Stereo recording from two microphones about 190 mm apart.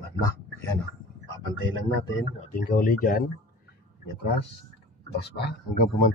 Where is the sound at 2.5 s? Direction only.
50° left (ahead or behind).